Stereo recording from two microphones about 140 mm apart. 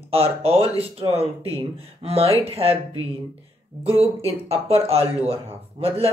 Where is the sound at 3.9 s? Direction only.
45° right (ahead or behind).